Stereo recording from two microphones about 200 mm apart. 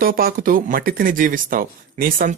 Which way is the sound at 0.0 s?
45° right (ahead or behind).